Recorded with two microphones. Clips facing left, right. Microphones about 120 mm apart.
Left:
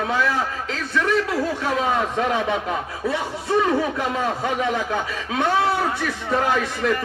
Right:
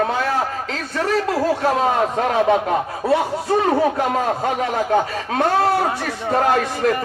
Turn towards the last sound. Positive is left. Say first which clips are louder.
# right 4 dB
turn(degrees=-50)  # may be behind; listen again after turning